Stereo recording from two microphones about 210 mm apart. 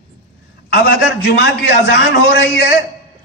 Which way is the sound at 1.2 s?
55° left (ahead or behind).